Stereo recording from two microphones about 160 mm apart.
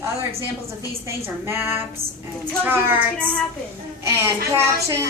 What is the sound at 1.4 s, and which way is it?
A woman's voice, 15° right (ahead or behind).